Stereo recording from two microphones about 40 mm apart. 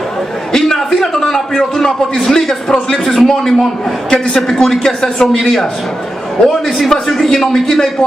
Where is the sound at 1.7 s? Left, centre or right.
Centre.